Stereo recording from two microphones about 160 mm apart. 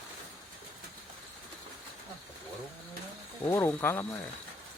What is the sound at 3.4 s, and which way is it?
Speech, 15° left (ahead or behind).